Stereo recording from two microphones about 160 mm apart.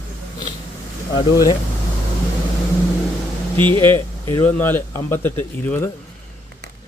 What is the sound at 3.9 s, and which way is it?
Speech, 15° left (ahead or behind).